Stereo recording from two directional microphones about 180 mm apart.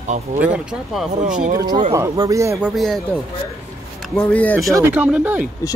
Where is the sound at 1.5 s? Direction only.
20° right (ahead or behind).